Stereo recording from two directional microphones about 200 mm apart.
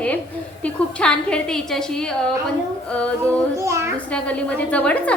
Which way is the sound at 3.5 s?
15° right (ahead or behind).